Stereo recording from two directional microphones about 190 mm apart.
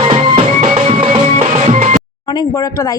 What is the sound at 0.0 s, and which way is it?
Music, 30° right (ahead or behind).